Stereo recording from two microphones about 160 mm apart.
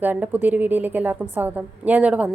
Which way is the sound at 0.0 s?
10° right (ahead or behind).